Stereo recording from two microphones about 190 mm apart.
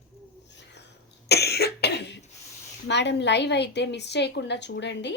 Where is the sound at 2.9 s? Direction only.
65° left (ahead or behind).